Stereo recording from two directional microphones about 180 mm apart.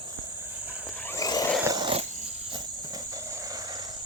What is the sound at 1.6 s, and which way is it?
Dog, 20° right (ahead or behind).